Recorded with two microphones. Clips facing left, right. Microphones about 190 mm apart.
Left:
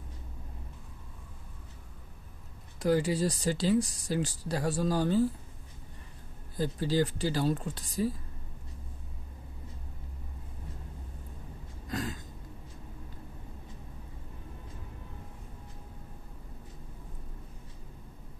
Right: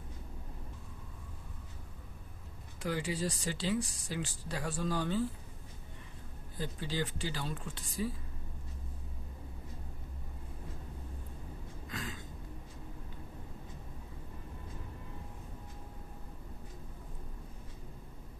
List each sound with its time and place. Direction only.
2.8 s speech: 40° left (ahead or behind)
6.6 s speech: 40° left (ahead or behind)
11.9 s a sound: 40° left (ahead or behind)